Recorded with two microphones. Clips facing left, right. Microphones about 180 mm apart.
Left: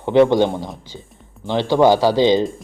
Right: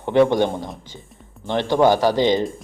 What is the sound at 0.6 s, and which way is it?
Speech, centre (ahead or behind).